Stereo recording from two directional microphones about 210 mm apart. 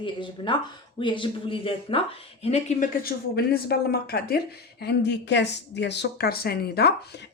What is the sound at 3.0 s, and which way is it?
Speech, 50° left (ahead or behind).